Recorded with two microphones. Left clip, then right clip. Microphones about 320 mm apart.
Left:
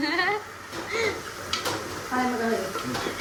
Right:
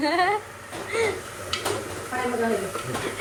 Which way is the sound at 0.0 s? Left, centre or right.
Centre.